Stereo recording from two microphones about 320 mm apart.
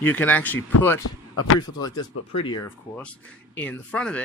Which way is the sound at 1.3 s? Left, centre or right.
Left.